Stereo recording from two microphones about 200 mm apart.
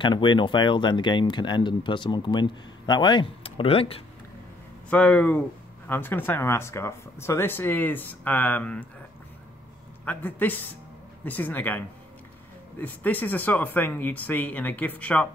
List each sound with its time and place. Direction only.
0.0 s speech: 25° left (ahead or behind)
4.8 s speech: 5° left (ahead or behind)
10.0 s speech: 10° left (ahead or behind)
12.8 s speech: 10° left (ahead or behind)